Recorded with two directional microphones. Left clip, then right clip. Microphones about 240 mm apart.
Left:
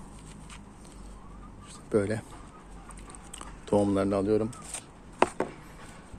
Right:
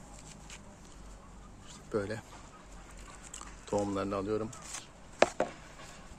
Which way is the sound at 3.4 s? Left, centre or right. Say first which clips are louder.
Left 7 dB; left.